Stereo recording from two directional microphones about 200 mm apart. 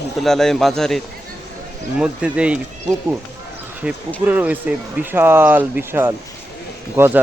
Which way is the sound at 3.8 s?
5° right (ahead or behind).